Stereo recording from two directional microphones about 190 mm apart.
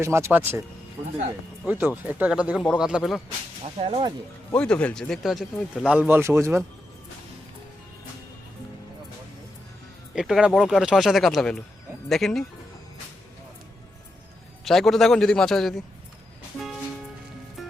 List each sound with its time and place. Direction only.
0.0 s speech: 15° right (ahead or behind)
1.6 s speech: 10° right (ahead or behind)
3.8 s speech: 30° right (ahead or behind)
4.5 s speech: 5° left (ahead or behind); by 6.7 s 15° right (ahead or behind)
10.2 s speech: 5° right (ahead or behind)
14.6 s speech: centre (ahead or behind)
17.6 s music: centre (ahead or behind)